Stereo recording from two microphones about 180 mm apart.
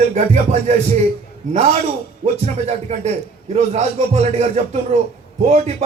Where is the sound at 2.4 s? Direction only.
40° right (ahead or behind).